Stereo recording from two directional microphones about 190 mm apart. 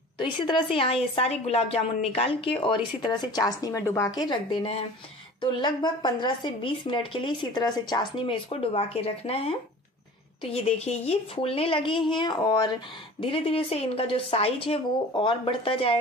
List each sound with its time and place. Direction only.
0.2 s a woman's voice: 25° left (ahead or behind)